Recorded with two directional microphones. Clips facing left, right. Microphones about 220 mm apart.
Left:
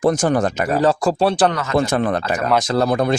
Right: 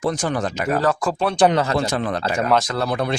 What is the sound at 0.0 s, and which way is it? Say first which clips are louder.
Speech: left 6 dB; 45° left (ahead or behind).